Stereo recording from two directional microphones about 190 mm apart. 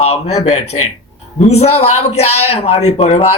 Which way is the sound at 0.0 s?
35° left (ahead or behind).